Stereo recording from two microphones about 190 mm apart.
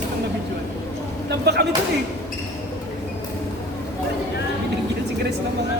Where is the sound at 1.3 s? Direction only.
60° right (ahead or behind).